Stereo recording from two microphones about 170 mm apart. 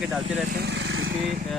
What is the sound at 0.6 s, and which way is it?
Vehicle, 90° right.